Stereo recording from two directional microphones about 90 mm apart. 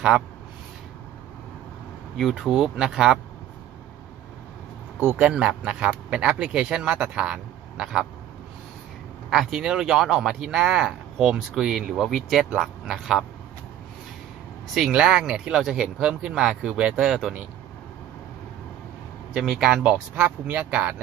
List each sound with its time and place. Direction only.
2.1 s speech: centre (ahead or behind)
5.1 s speech: 10° right (ahead or behind)
9.3 s speech: 5° right (ahead or behind)
14.7 s speech: 5° right (ahead or behind)
19.3 s speech: 5° right (ahead or behind)